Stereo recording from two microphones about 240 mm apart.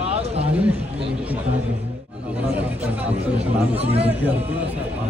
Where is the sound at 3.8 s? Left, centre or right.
Right.